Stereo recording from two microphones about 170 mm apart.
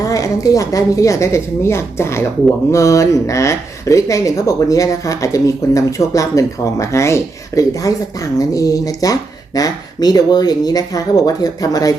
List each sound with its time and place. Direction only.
0.0 s speech: 20° left (ahead or behind)